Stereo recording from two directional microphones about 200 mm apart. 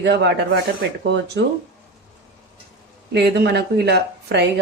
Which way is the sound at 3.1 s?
55° right (ahead or behind).